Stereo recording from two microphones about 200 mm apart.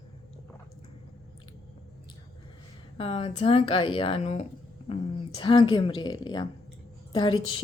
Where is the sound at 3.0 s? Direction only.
30° left (ahead or behind).